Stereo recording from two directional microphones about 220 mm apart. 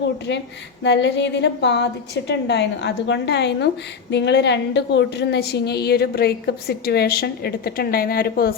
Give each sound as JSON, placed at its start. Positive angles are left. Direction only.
{"t": 0.3, "sound": "a woman's voice", "side_deg": 50}